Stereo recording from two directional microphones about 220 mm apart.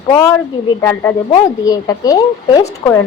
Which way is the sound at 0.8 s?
10° left (ahead or behind).